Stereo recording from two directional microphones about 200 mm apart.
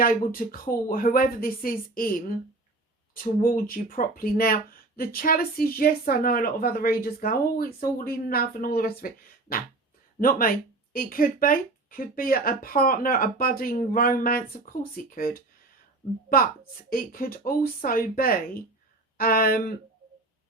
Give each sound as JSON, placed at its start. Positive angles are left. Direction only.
{"t": 0.0, "sound": "speech", "side_deg": 45}
{"t": 16.9, "sound": "speech", "side_deg": 45}